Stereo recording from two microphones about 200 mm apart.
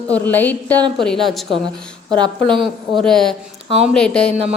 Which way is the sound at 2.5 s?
25° right (ahead or behind).